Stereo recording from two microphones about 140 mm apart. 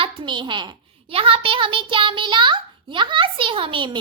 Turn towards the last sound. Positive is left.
turn(degrees=-35)  # may be behind; listen again after turning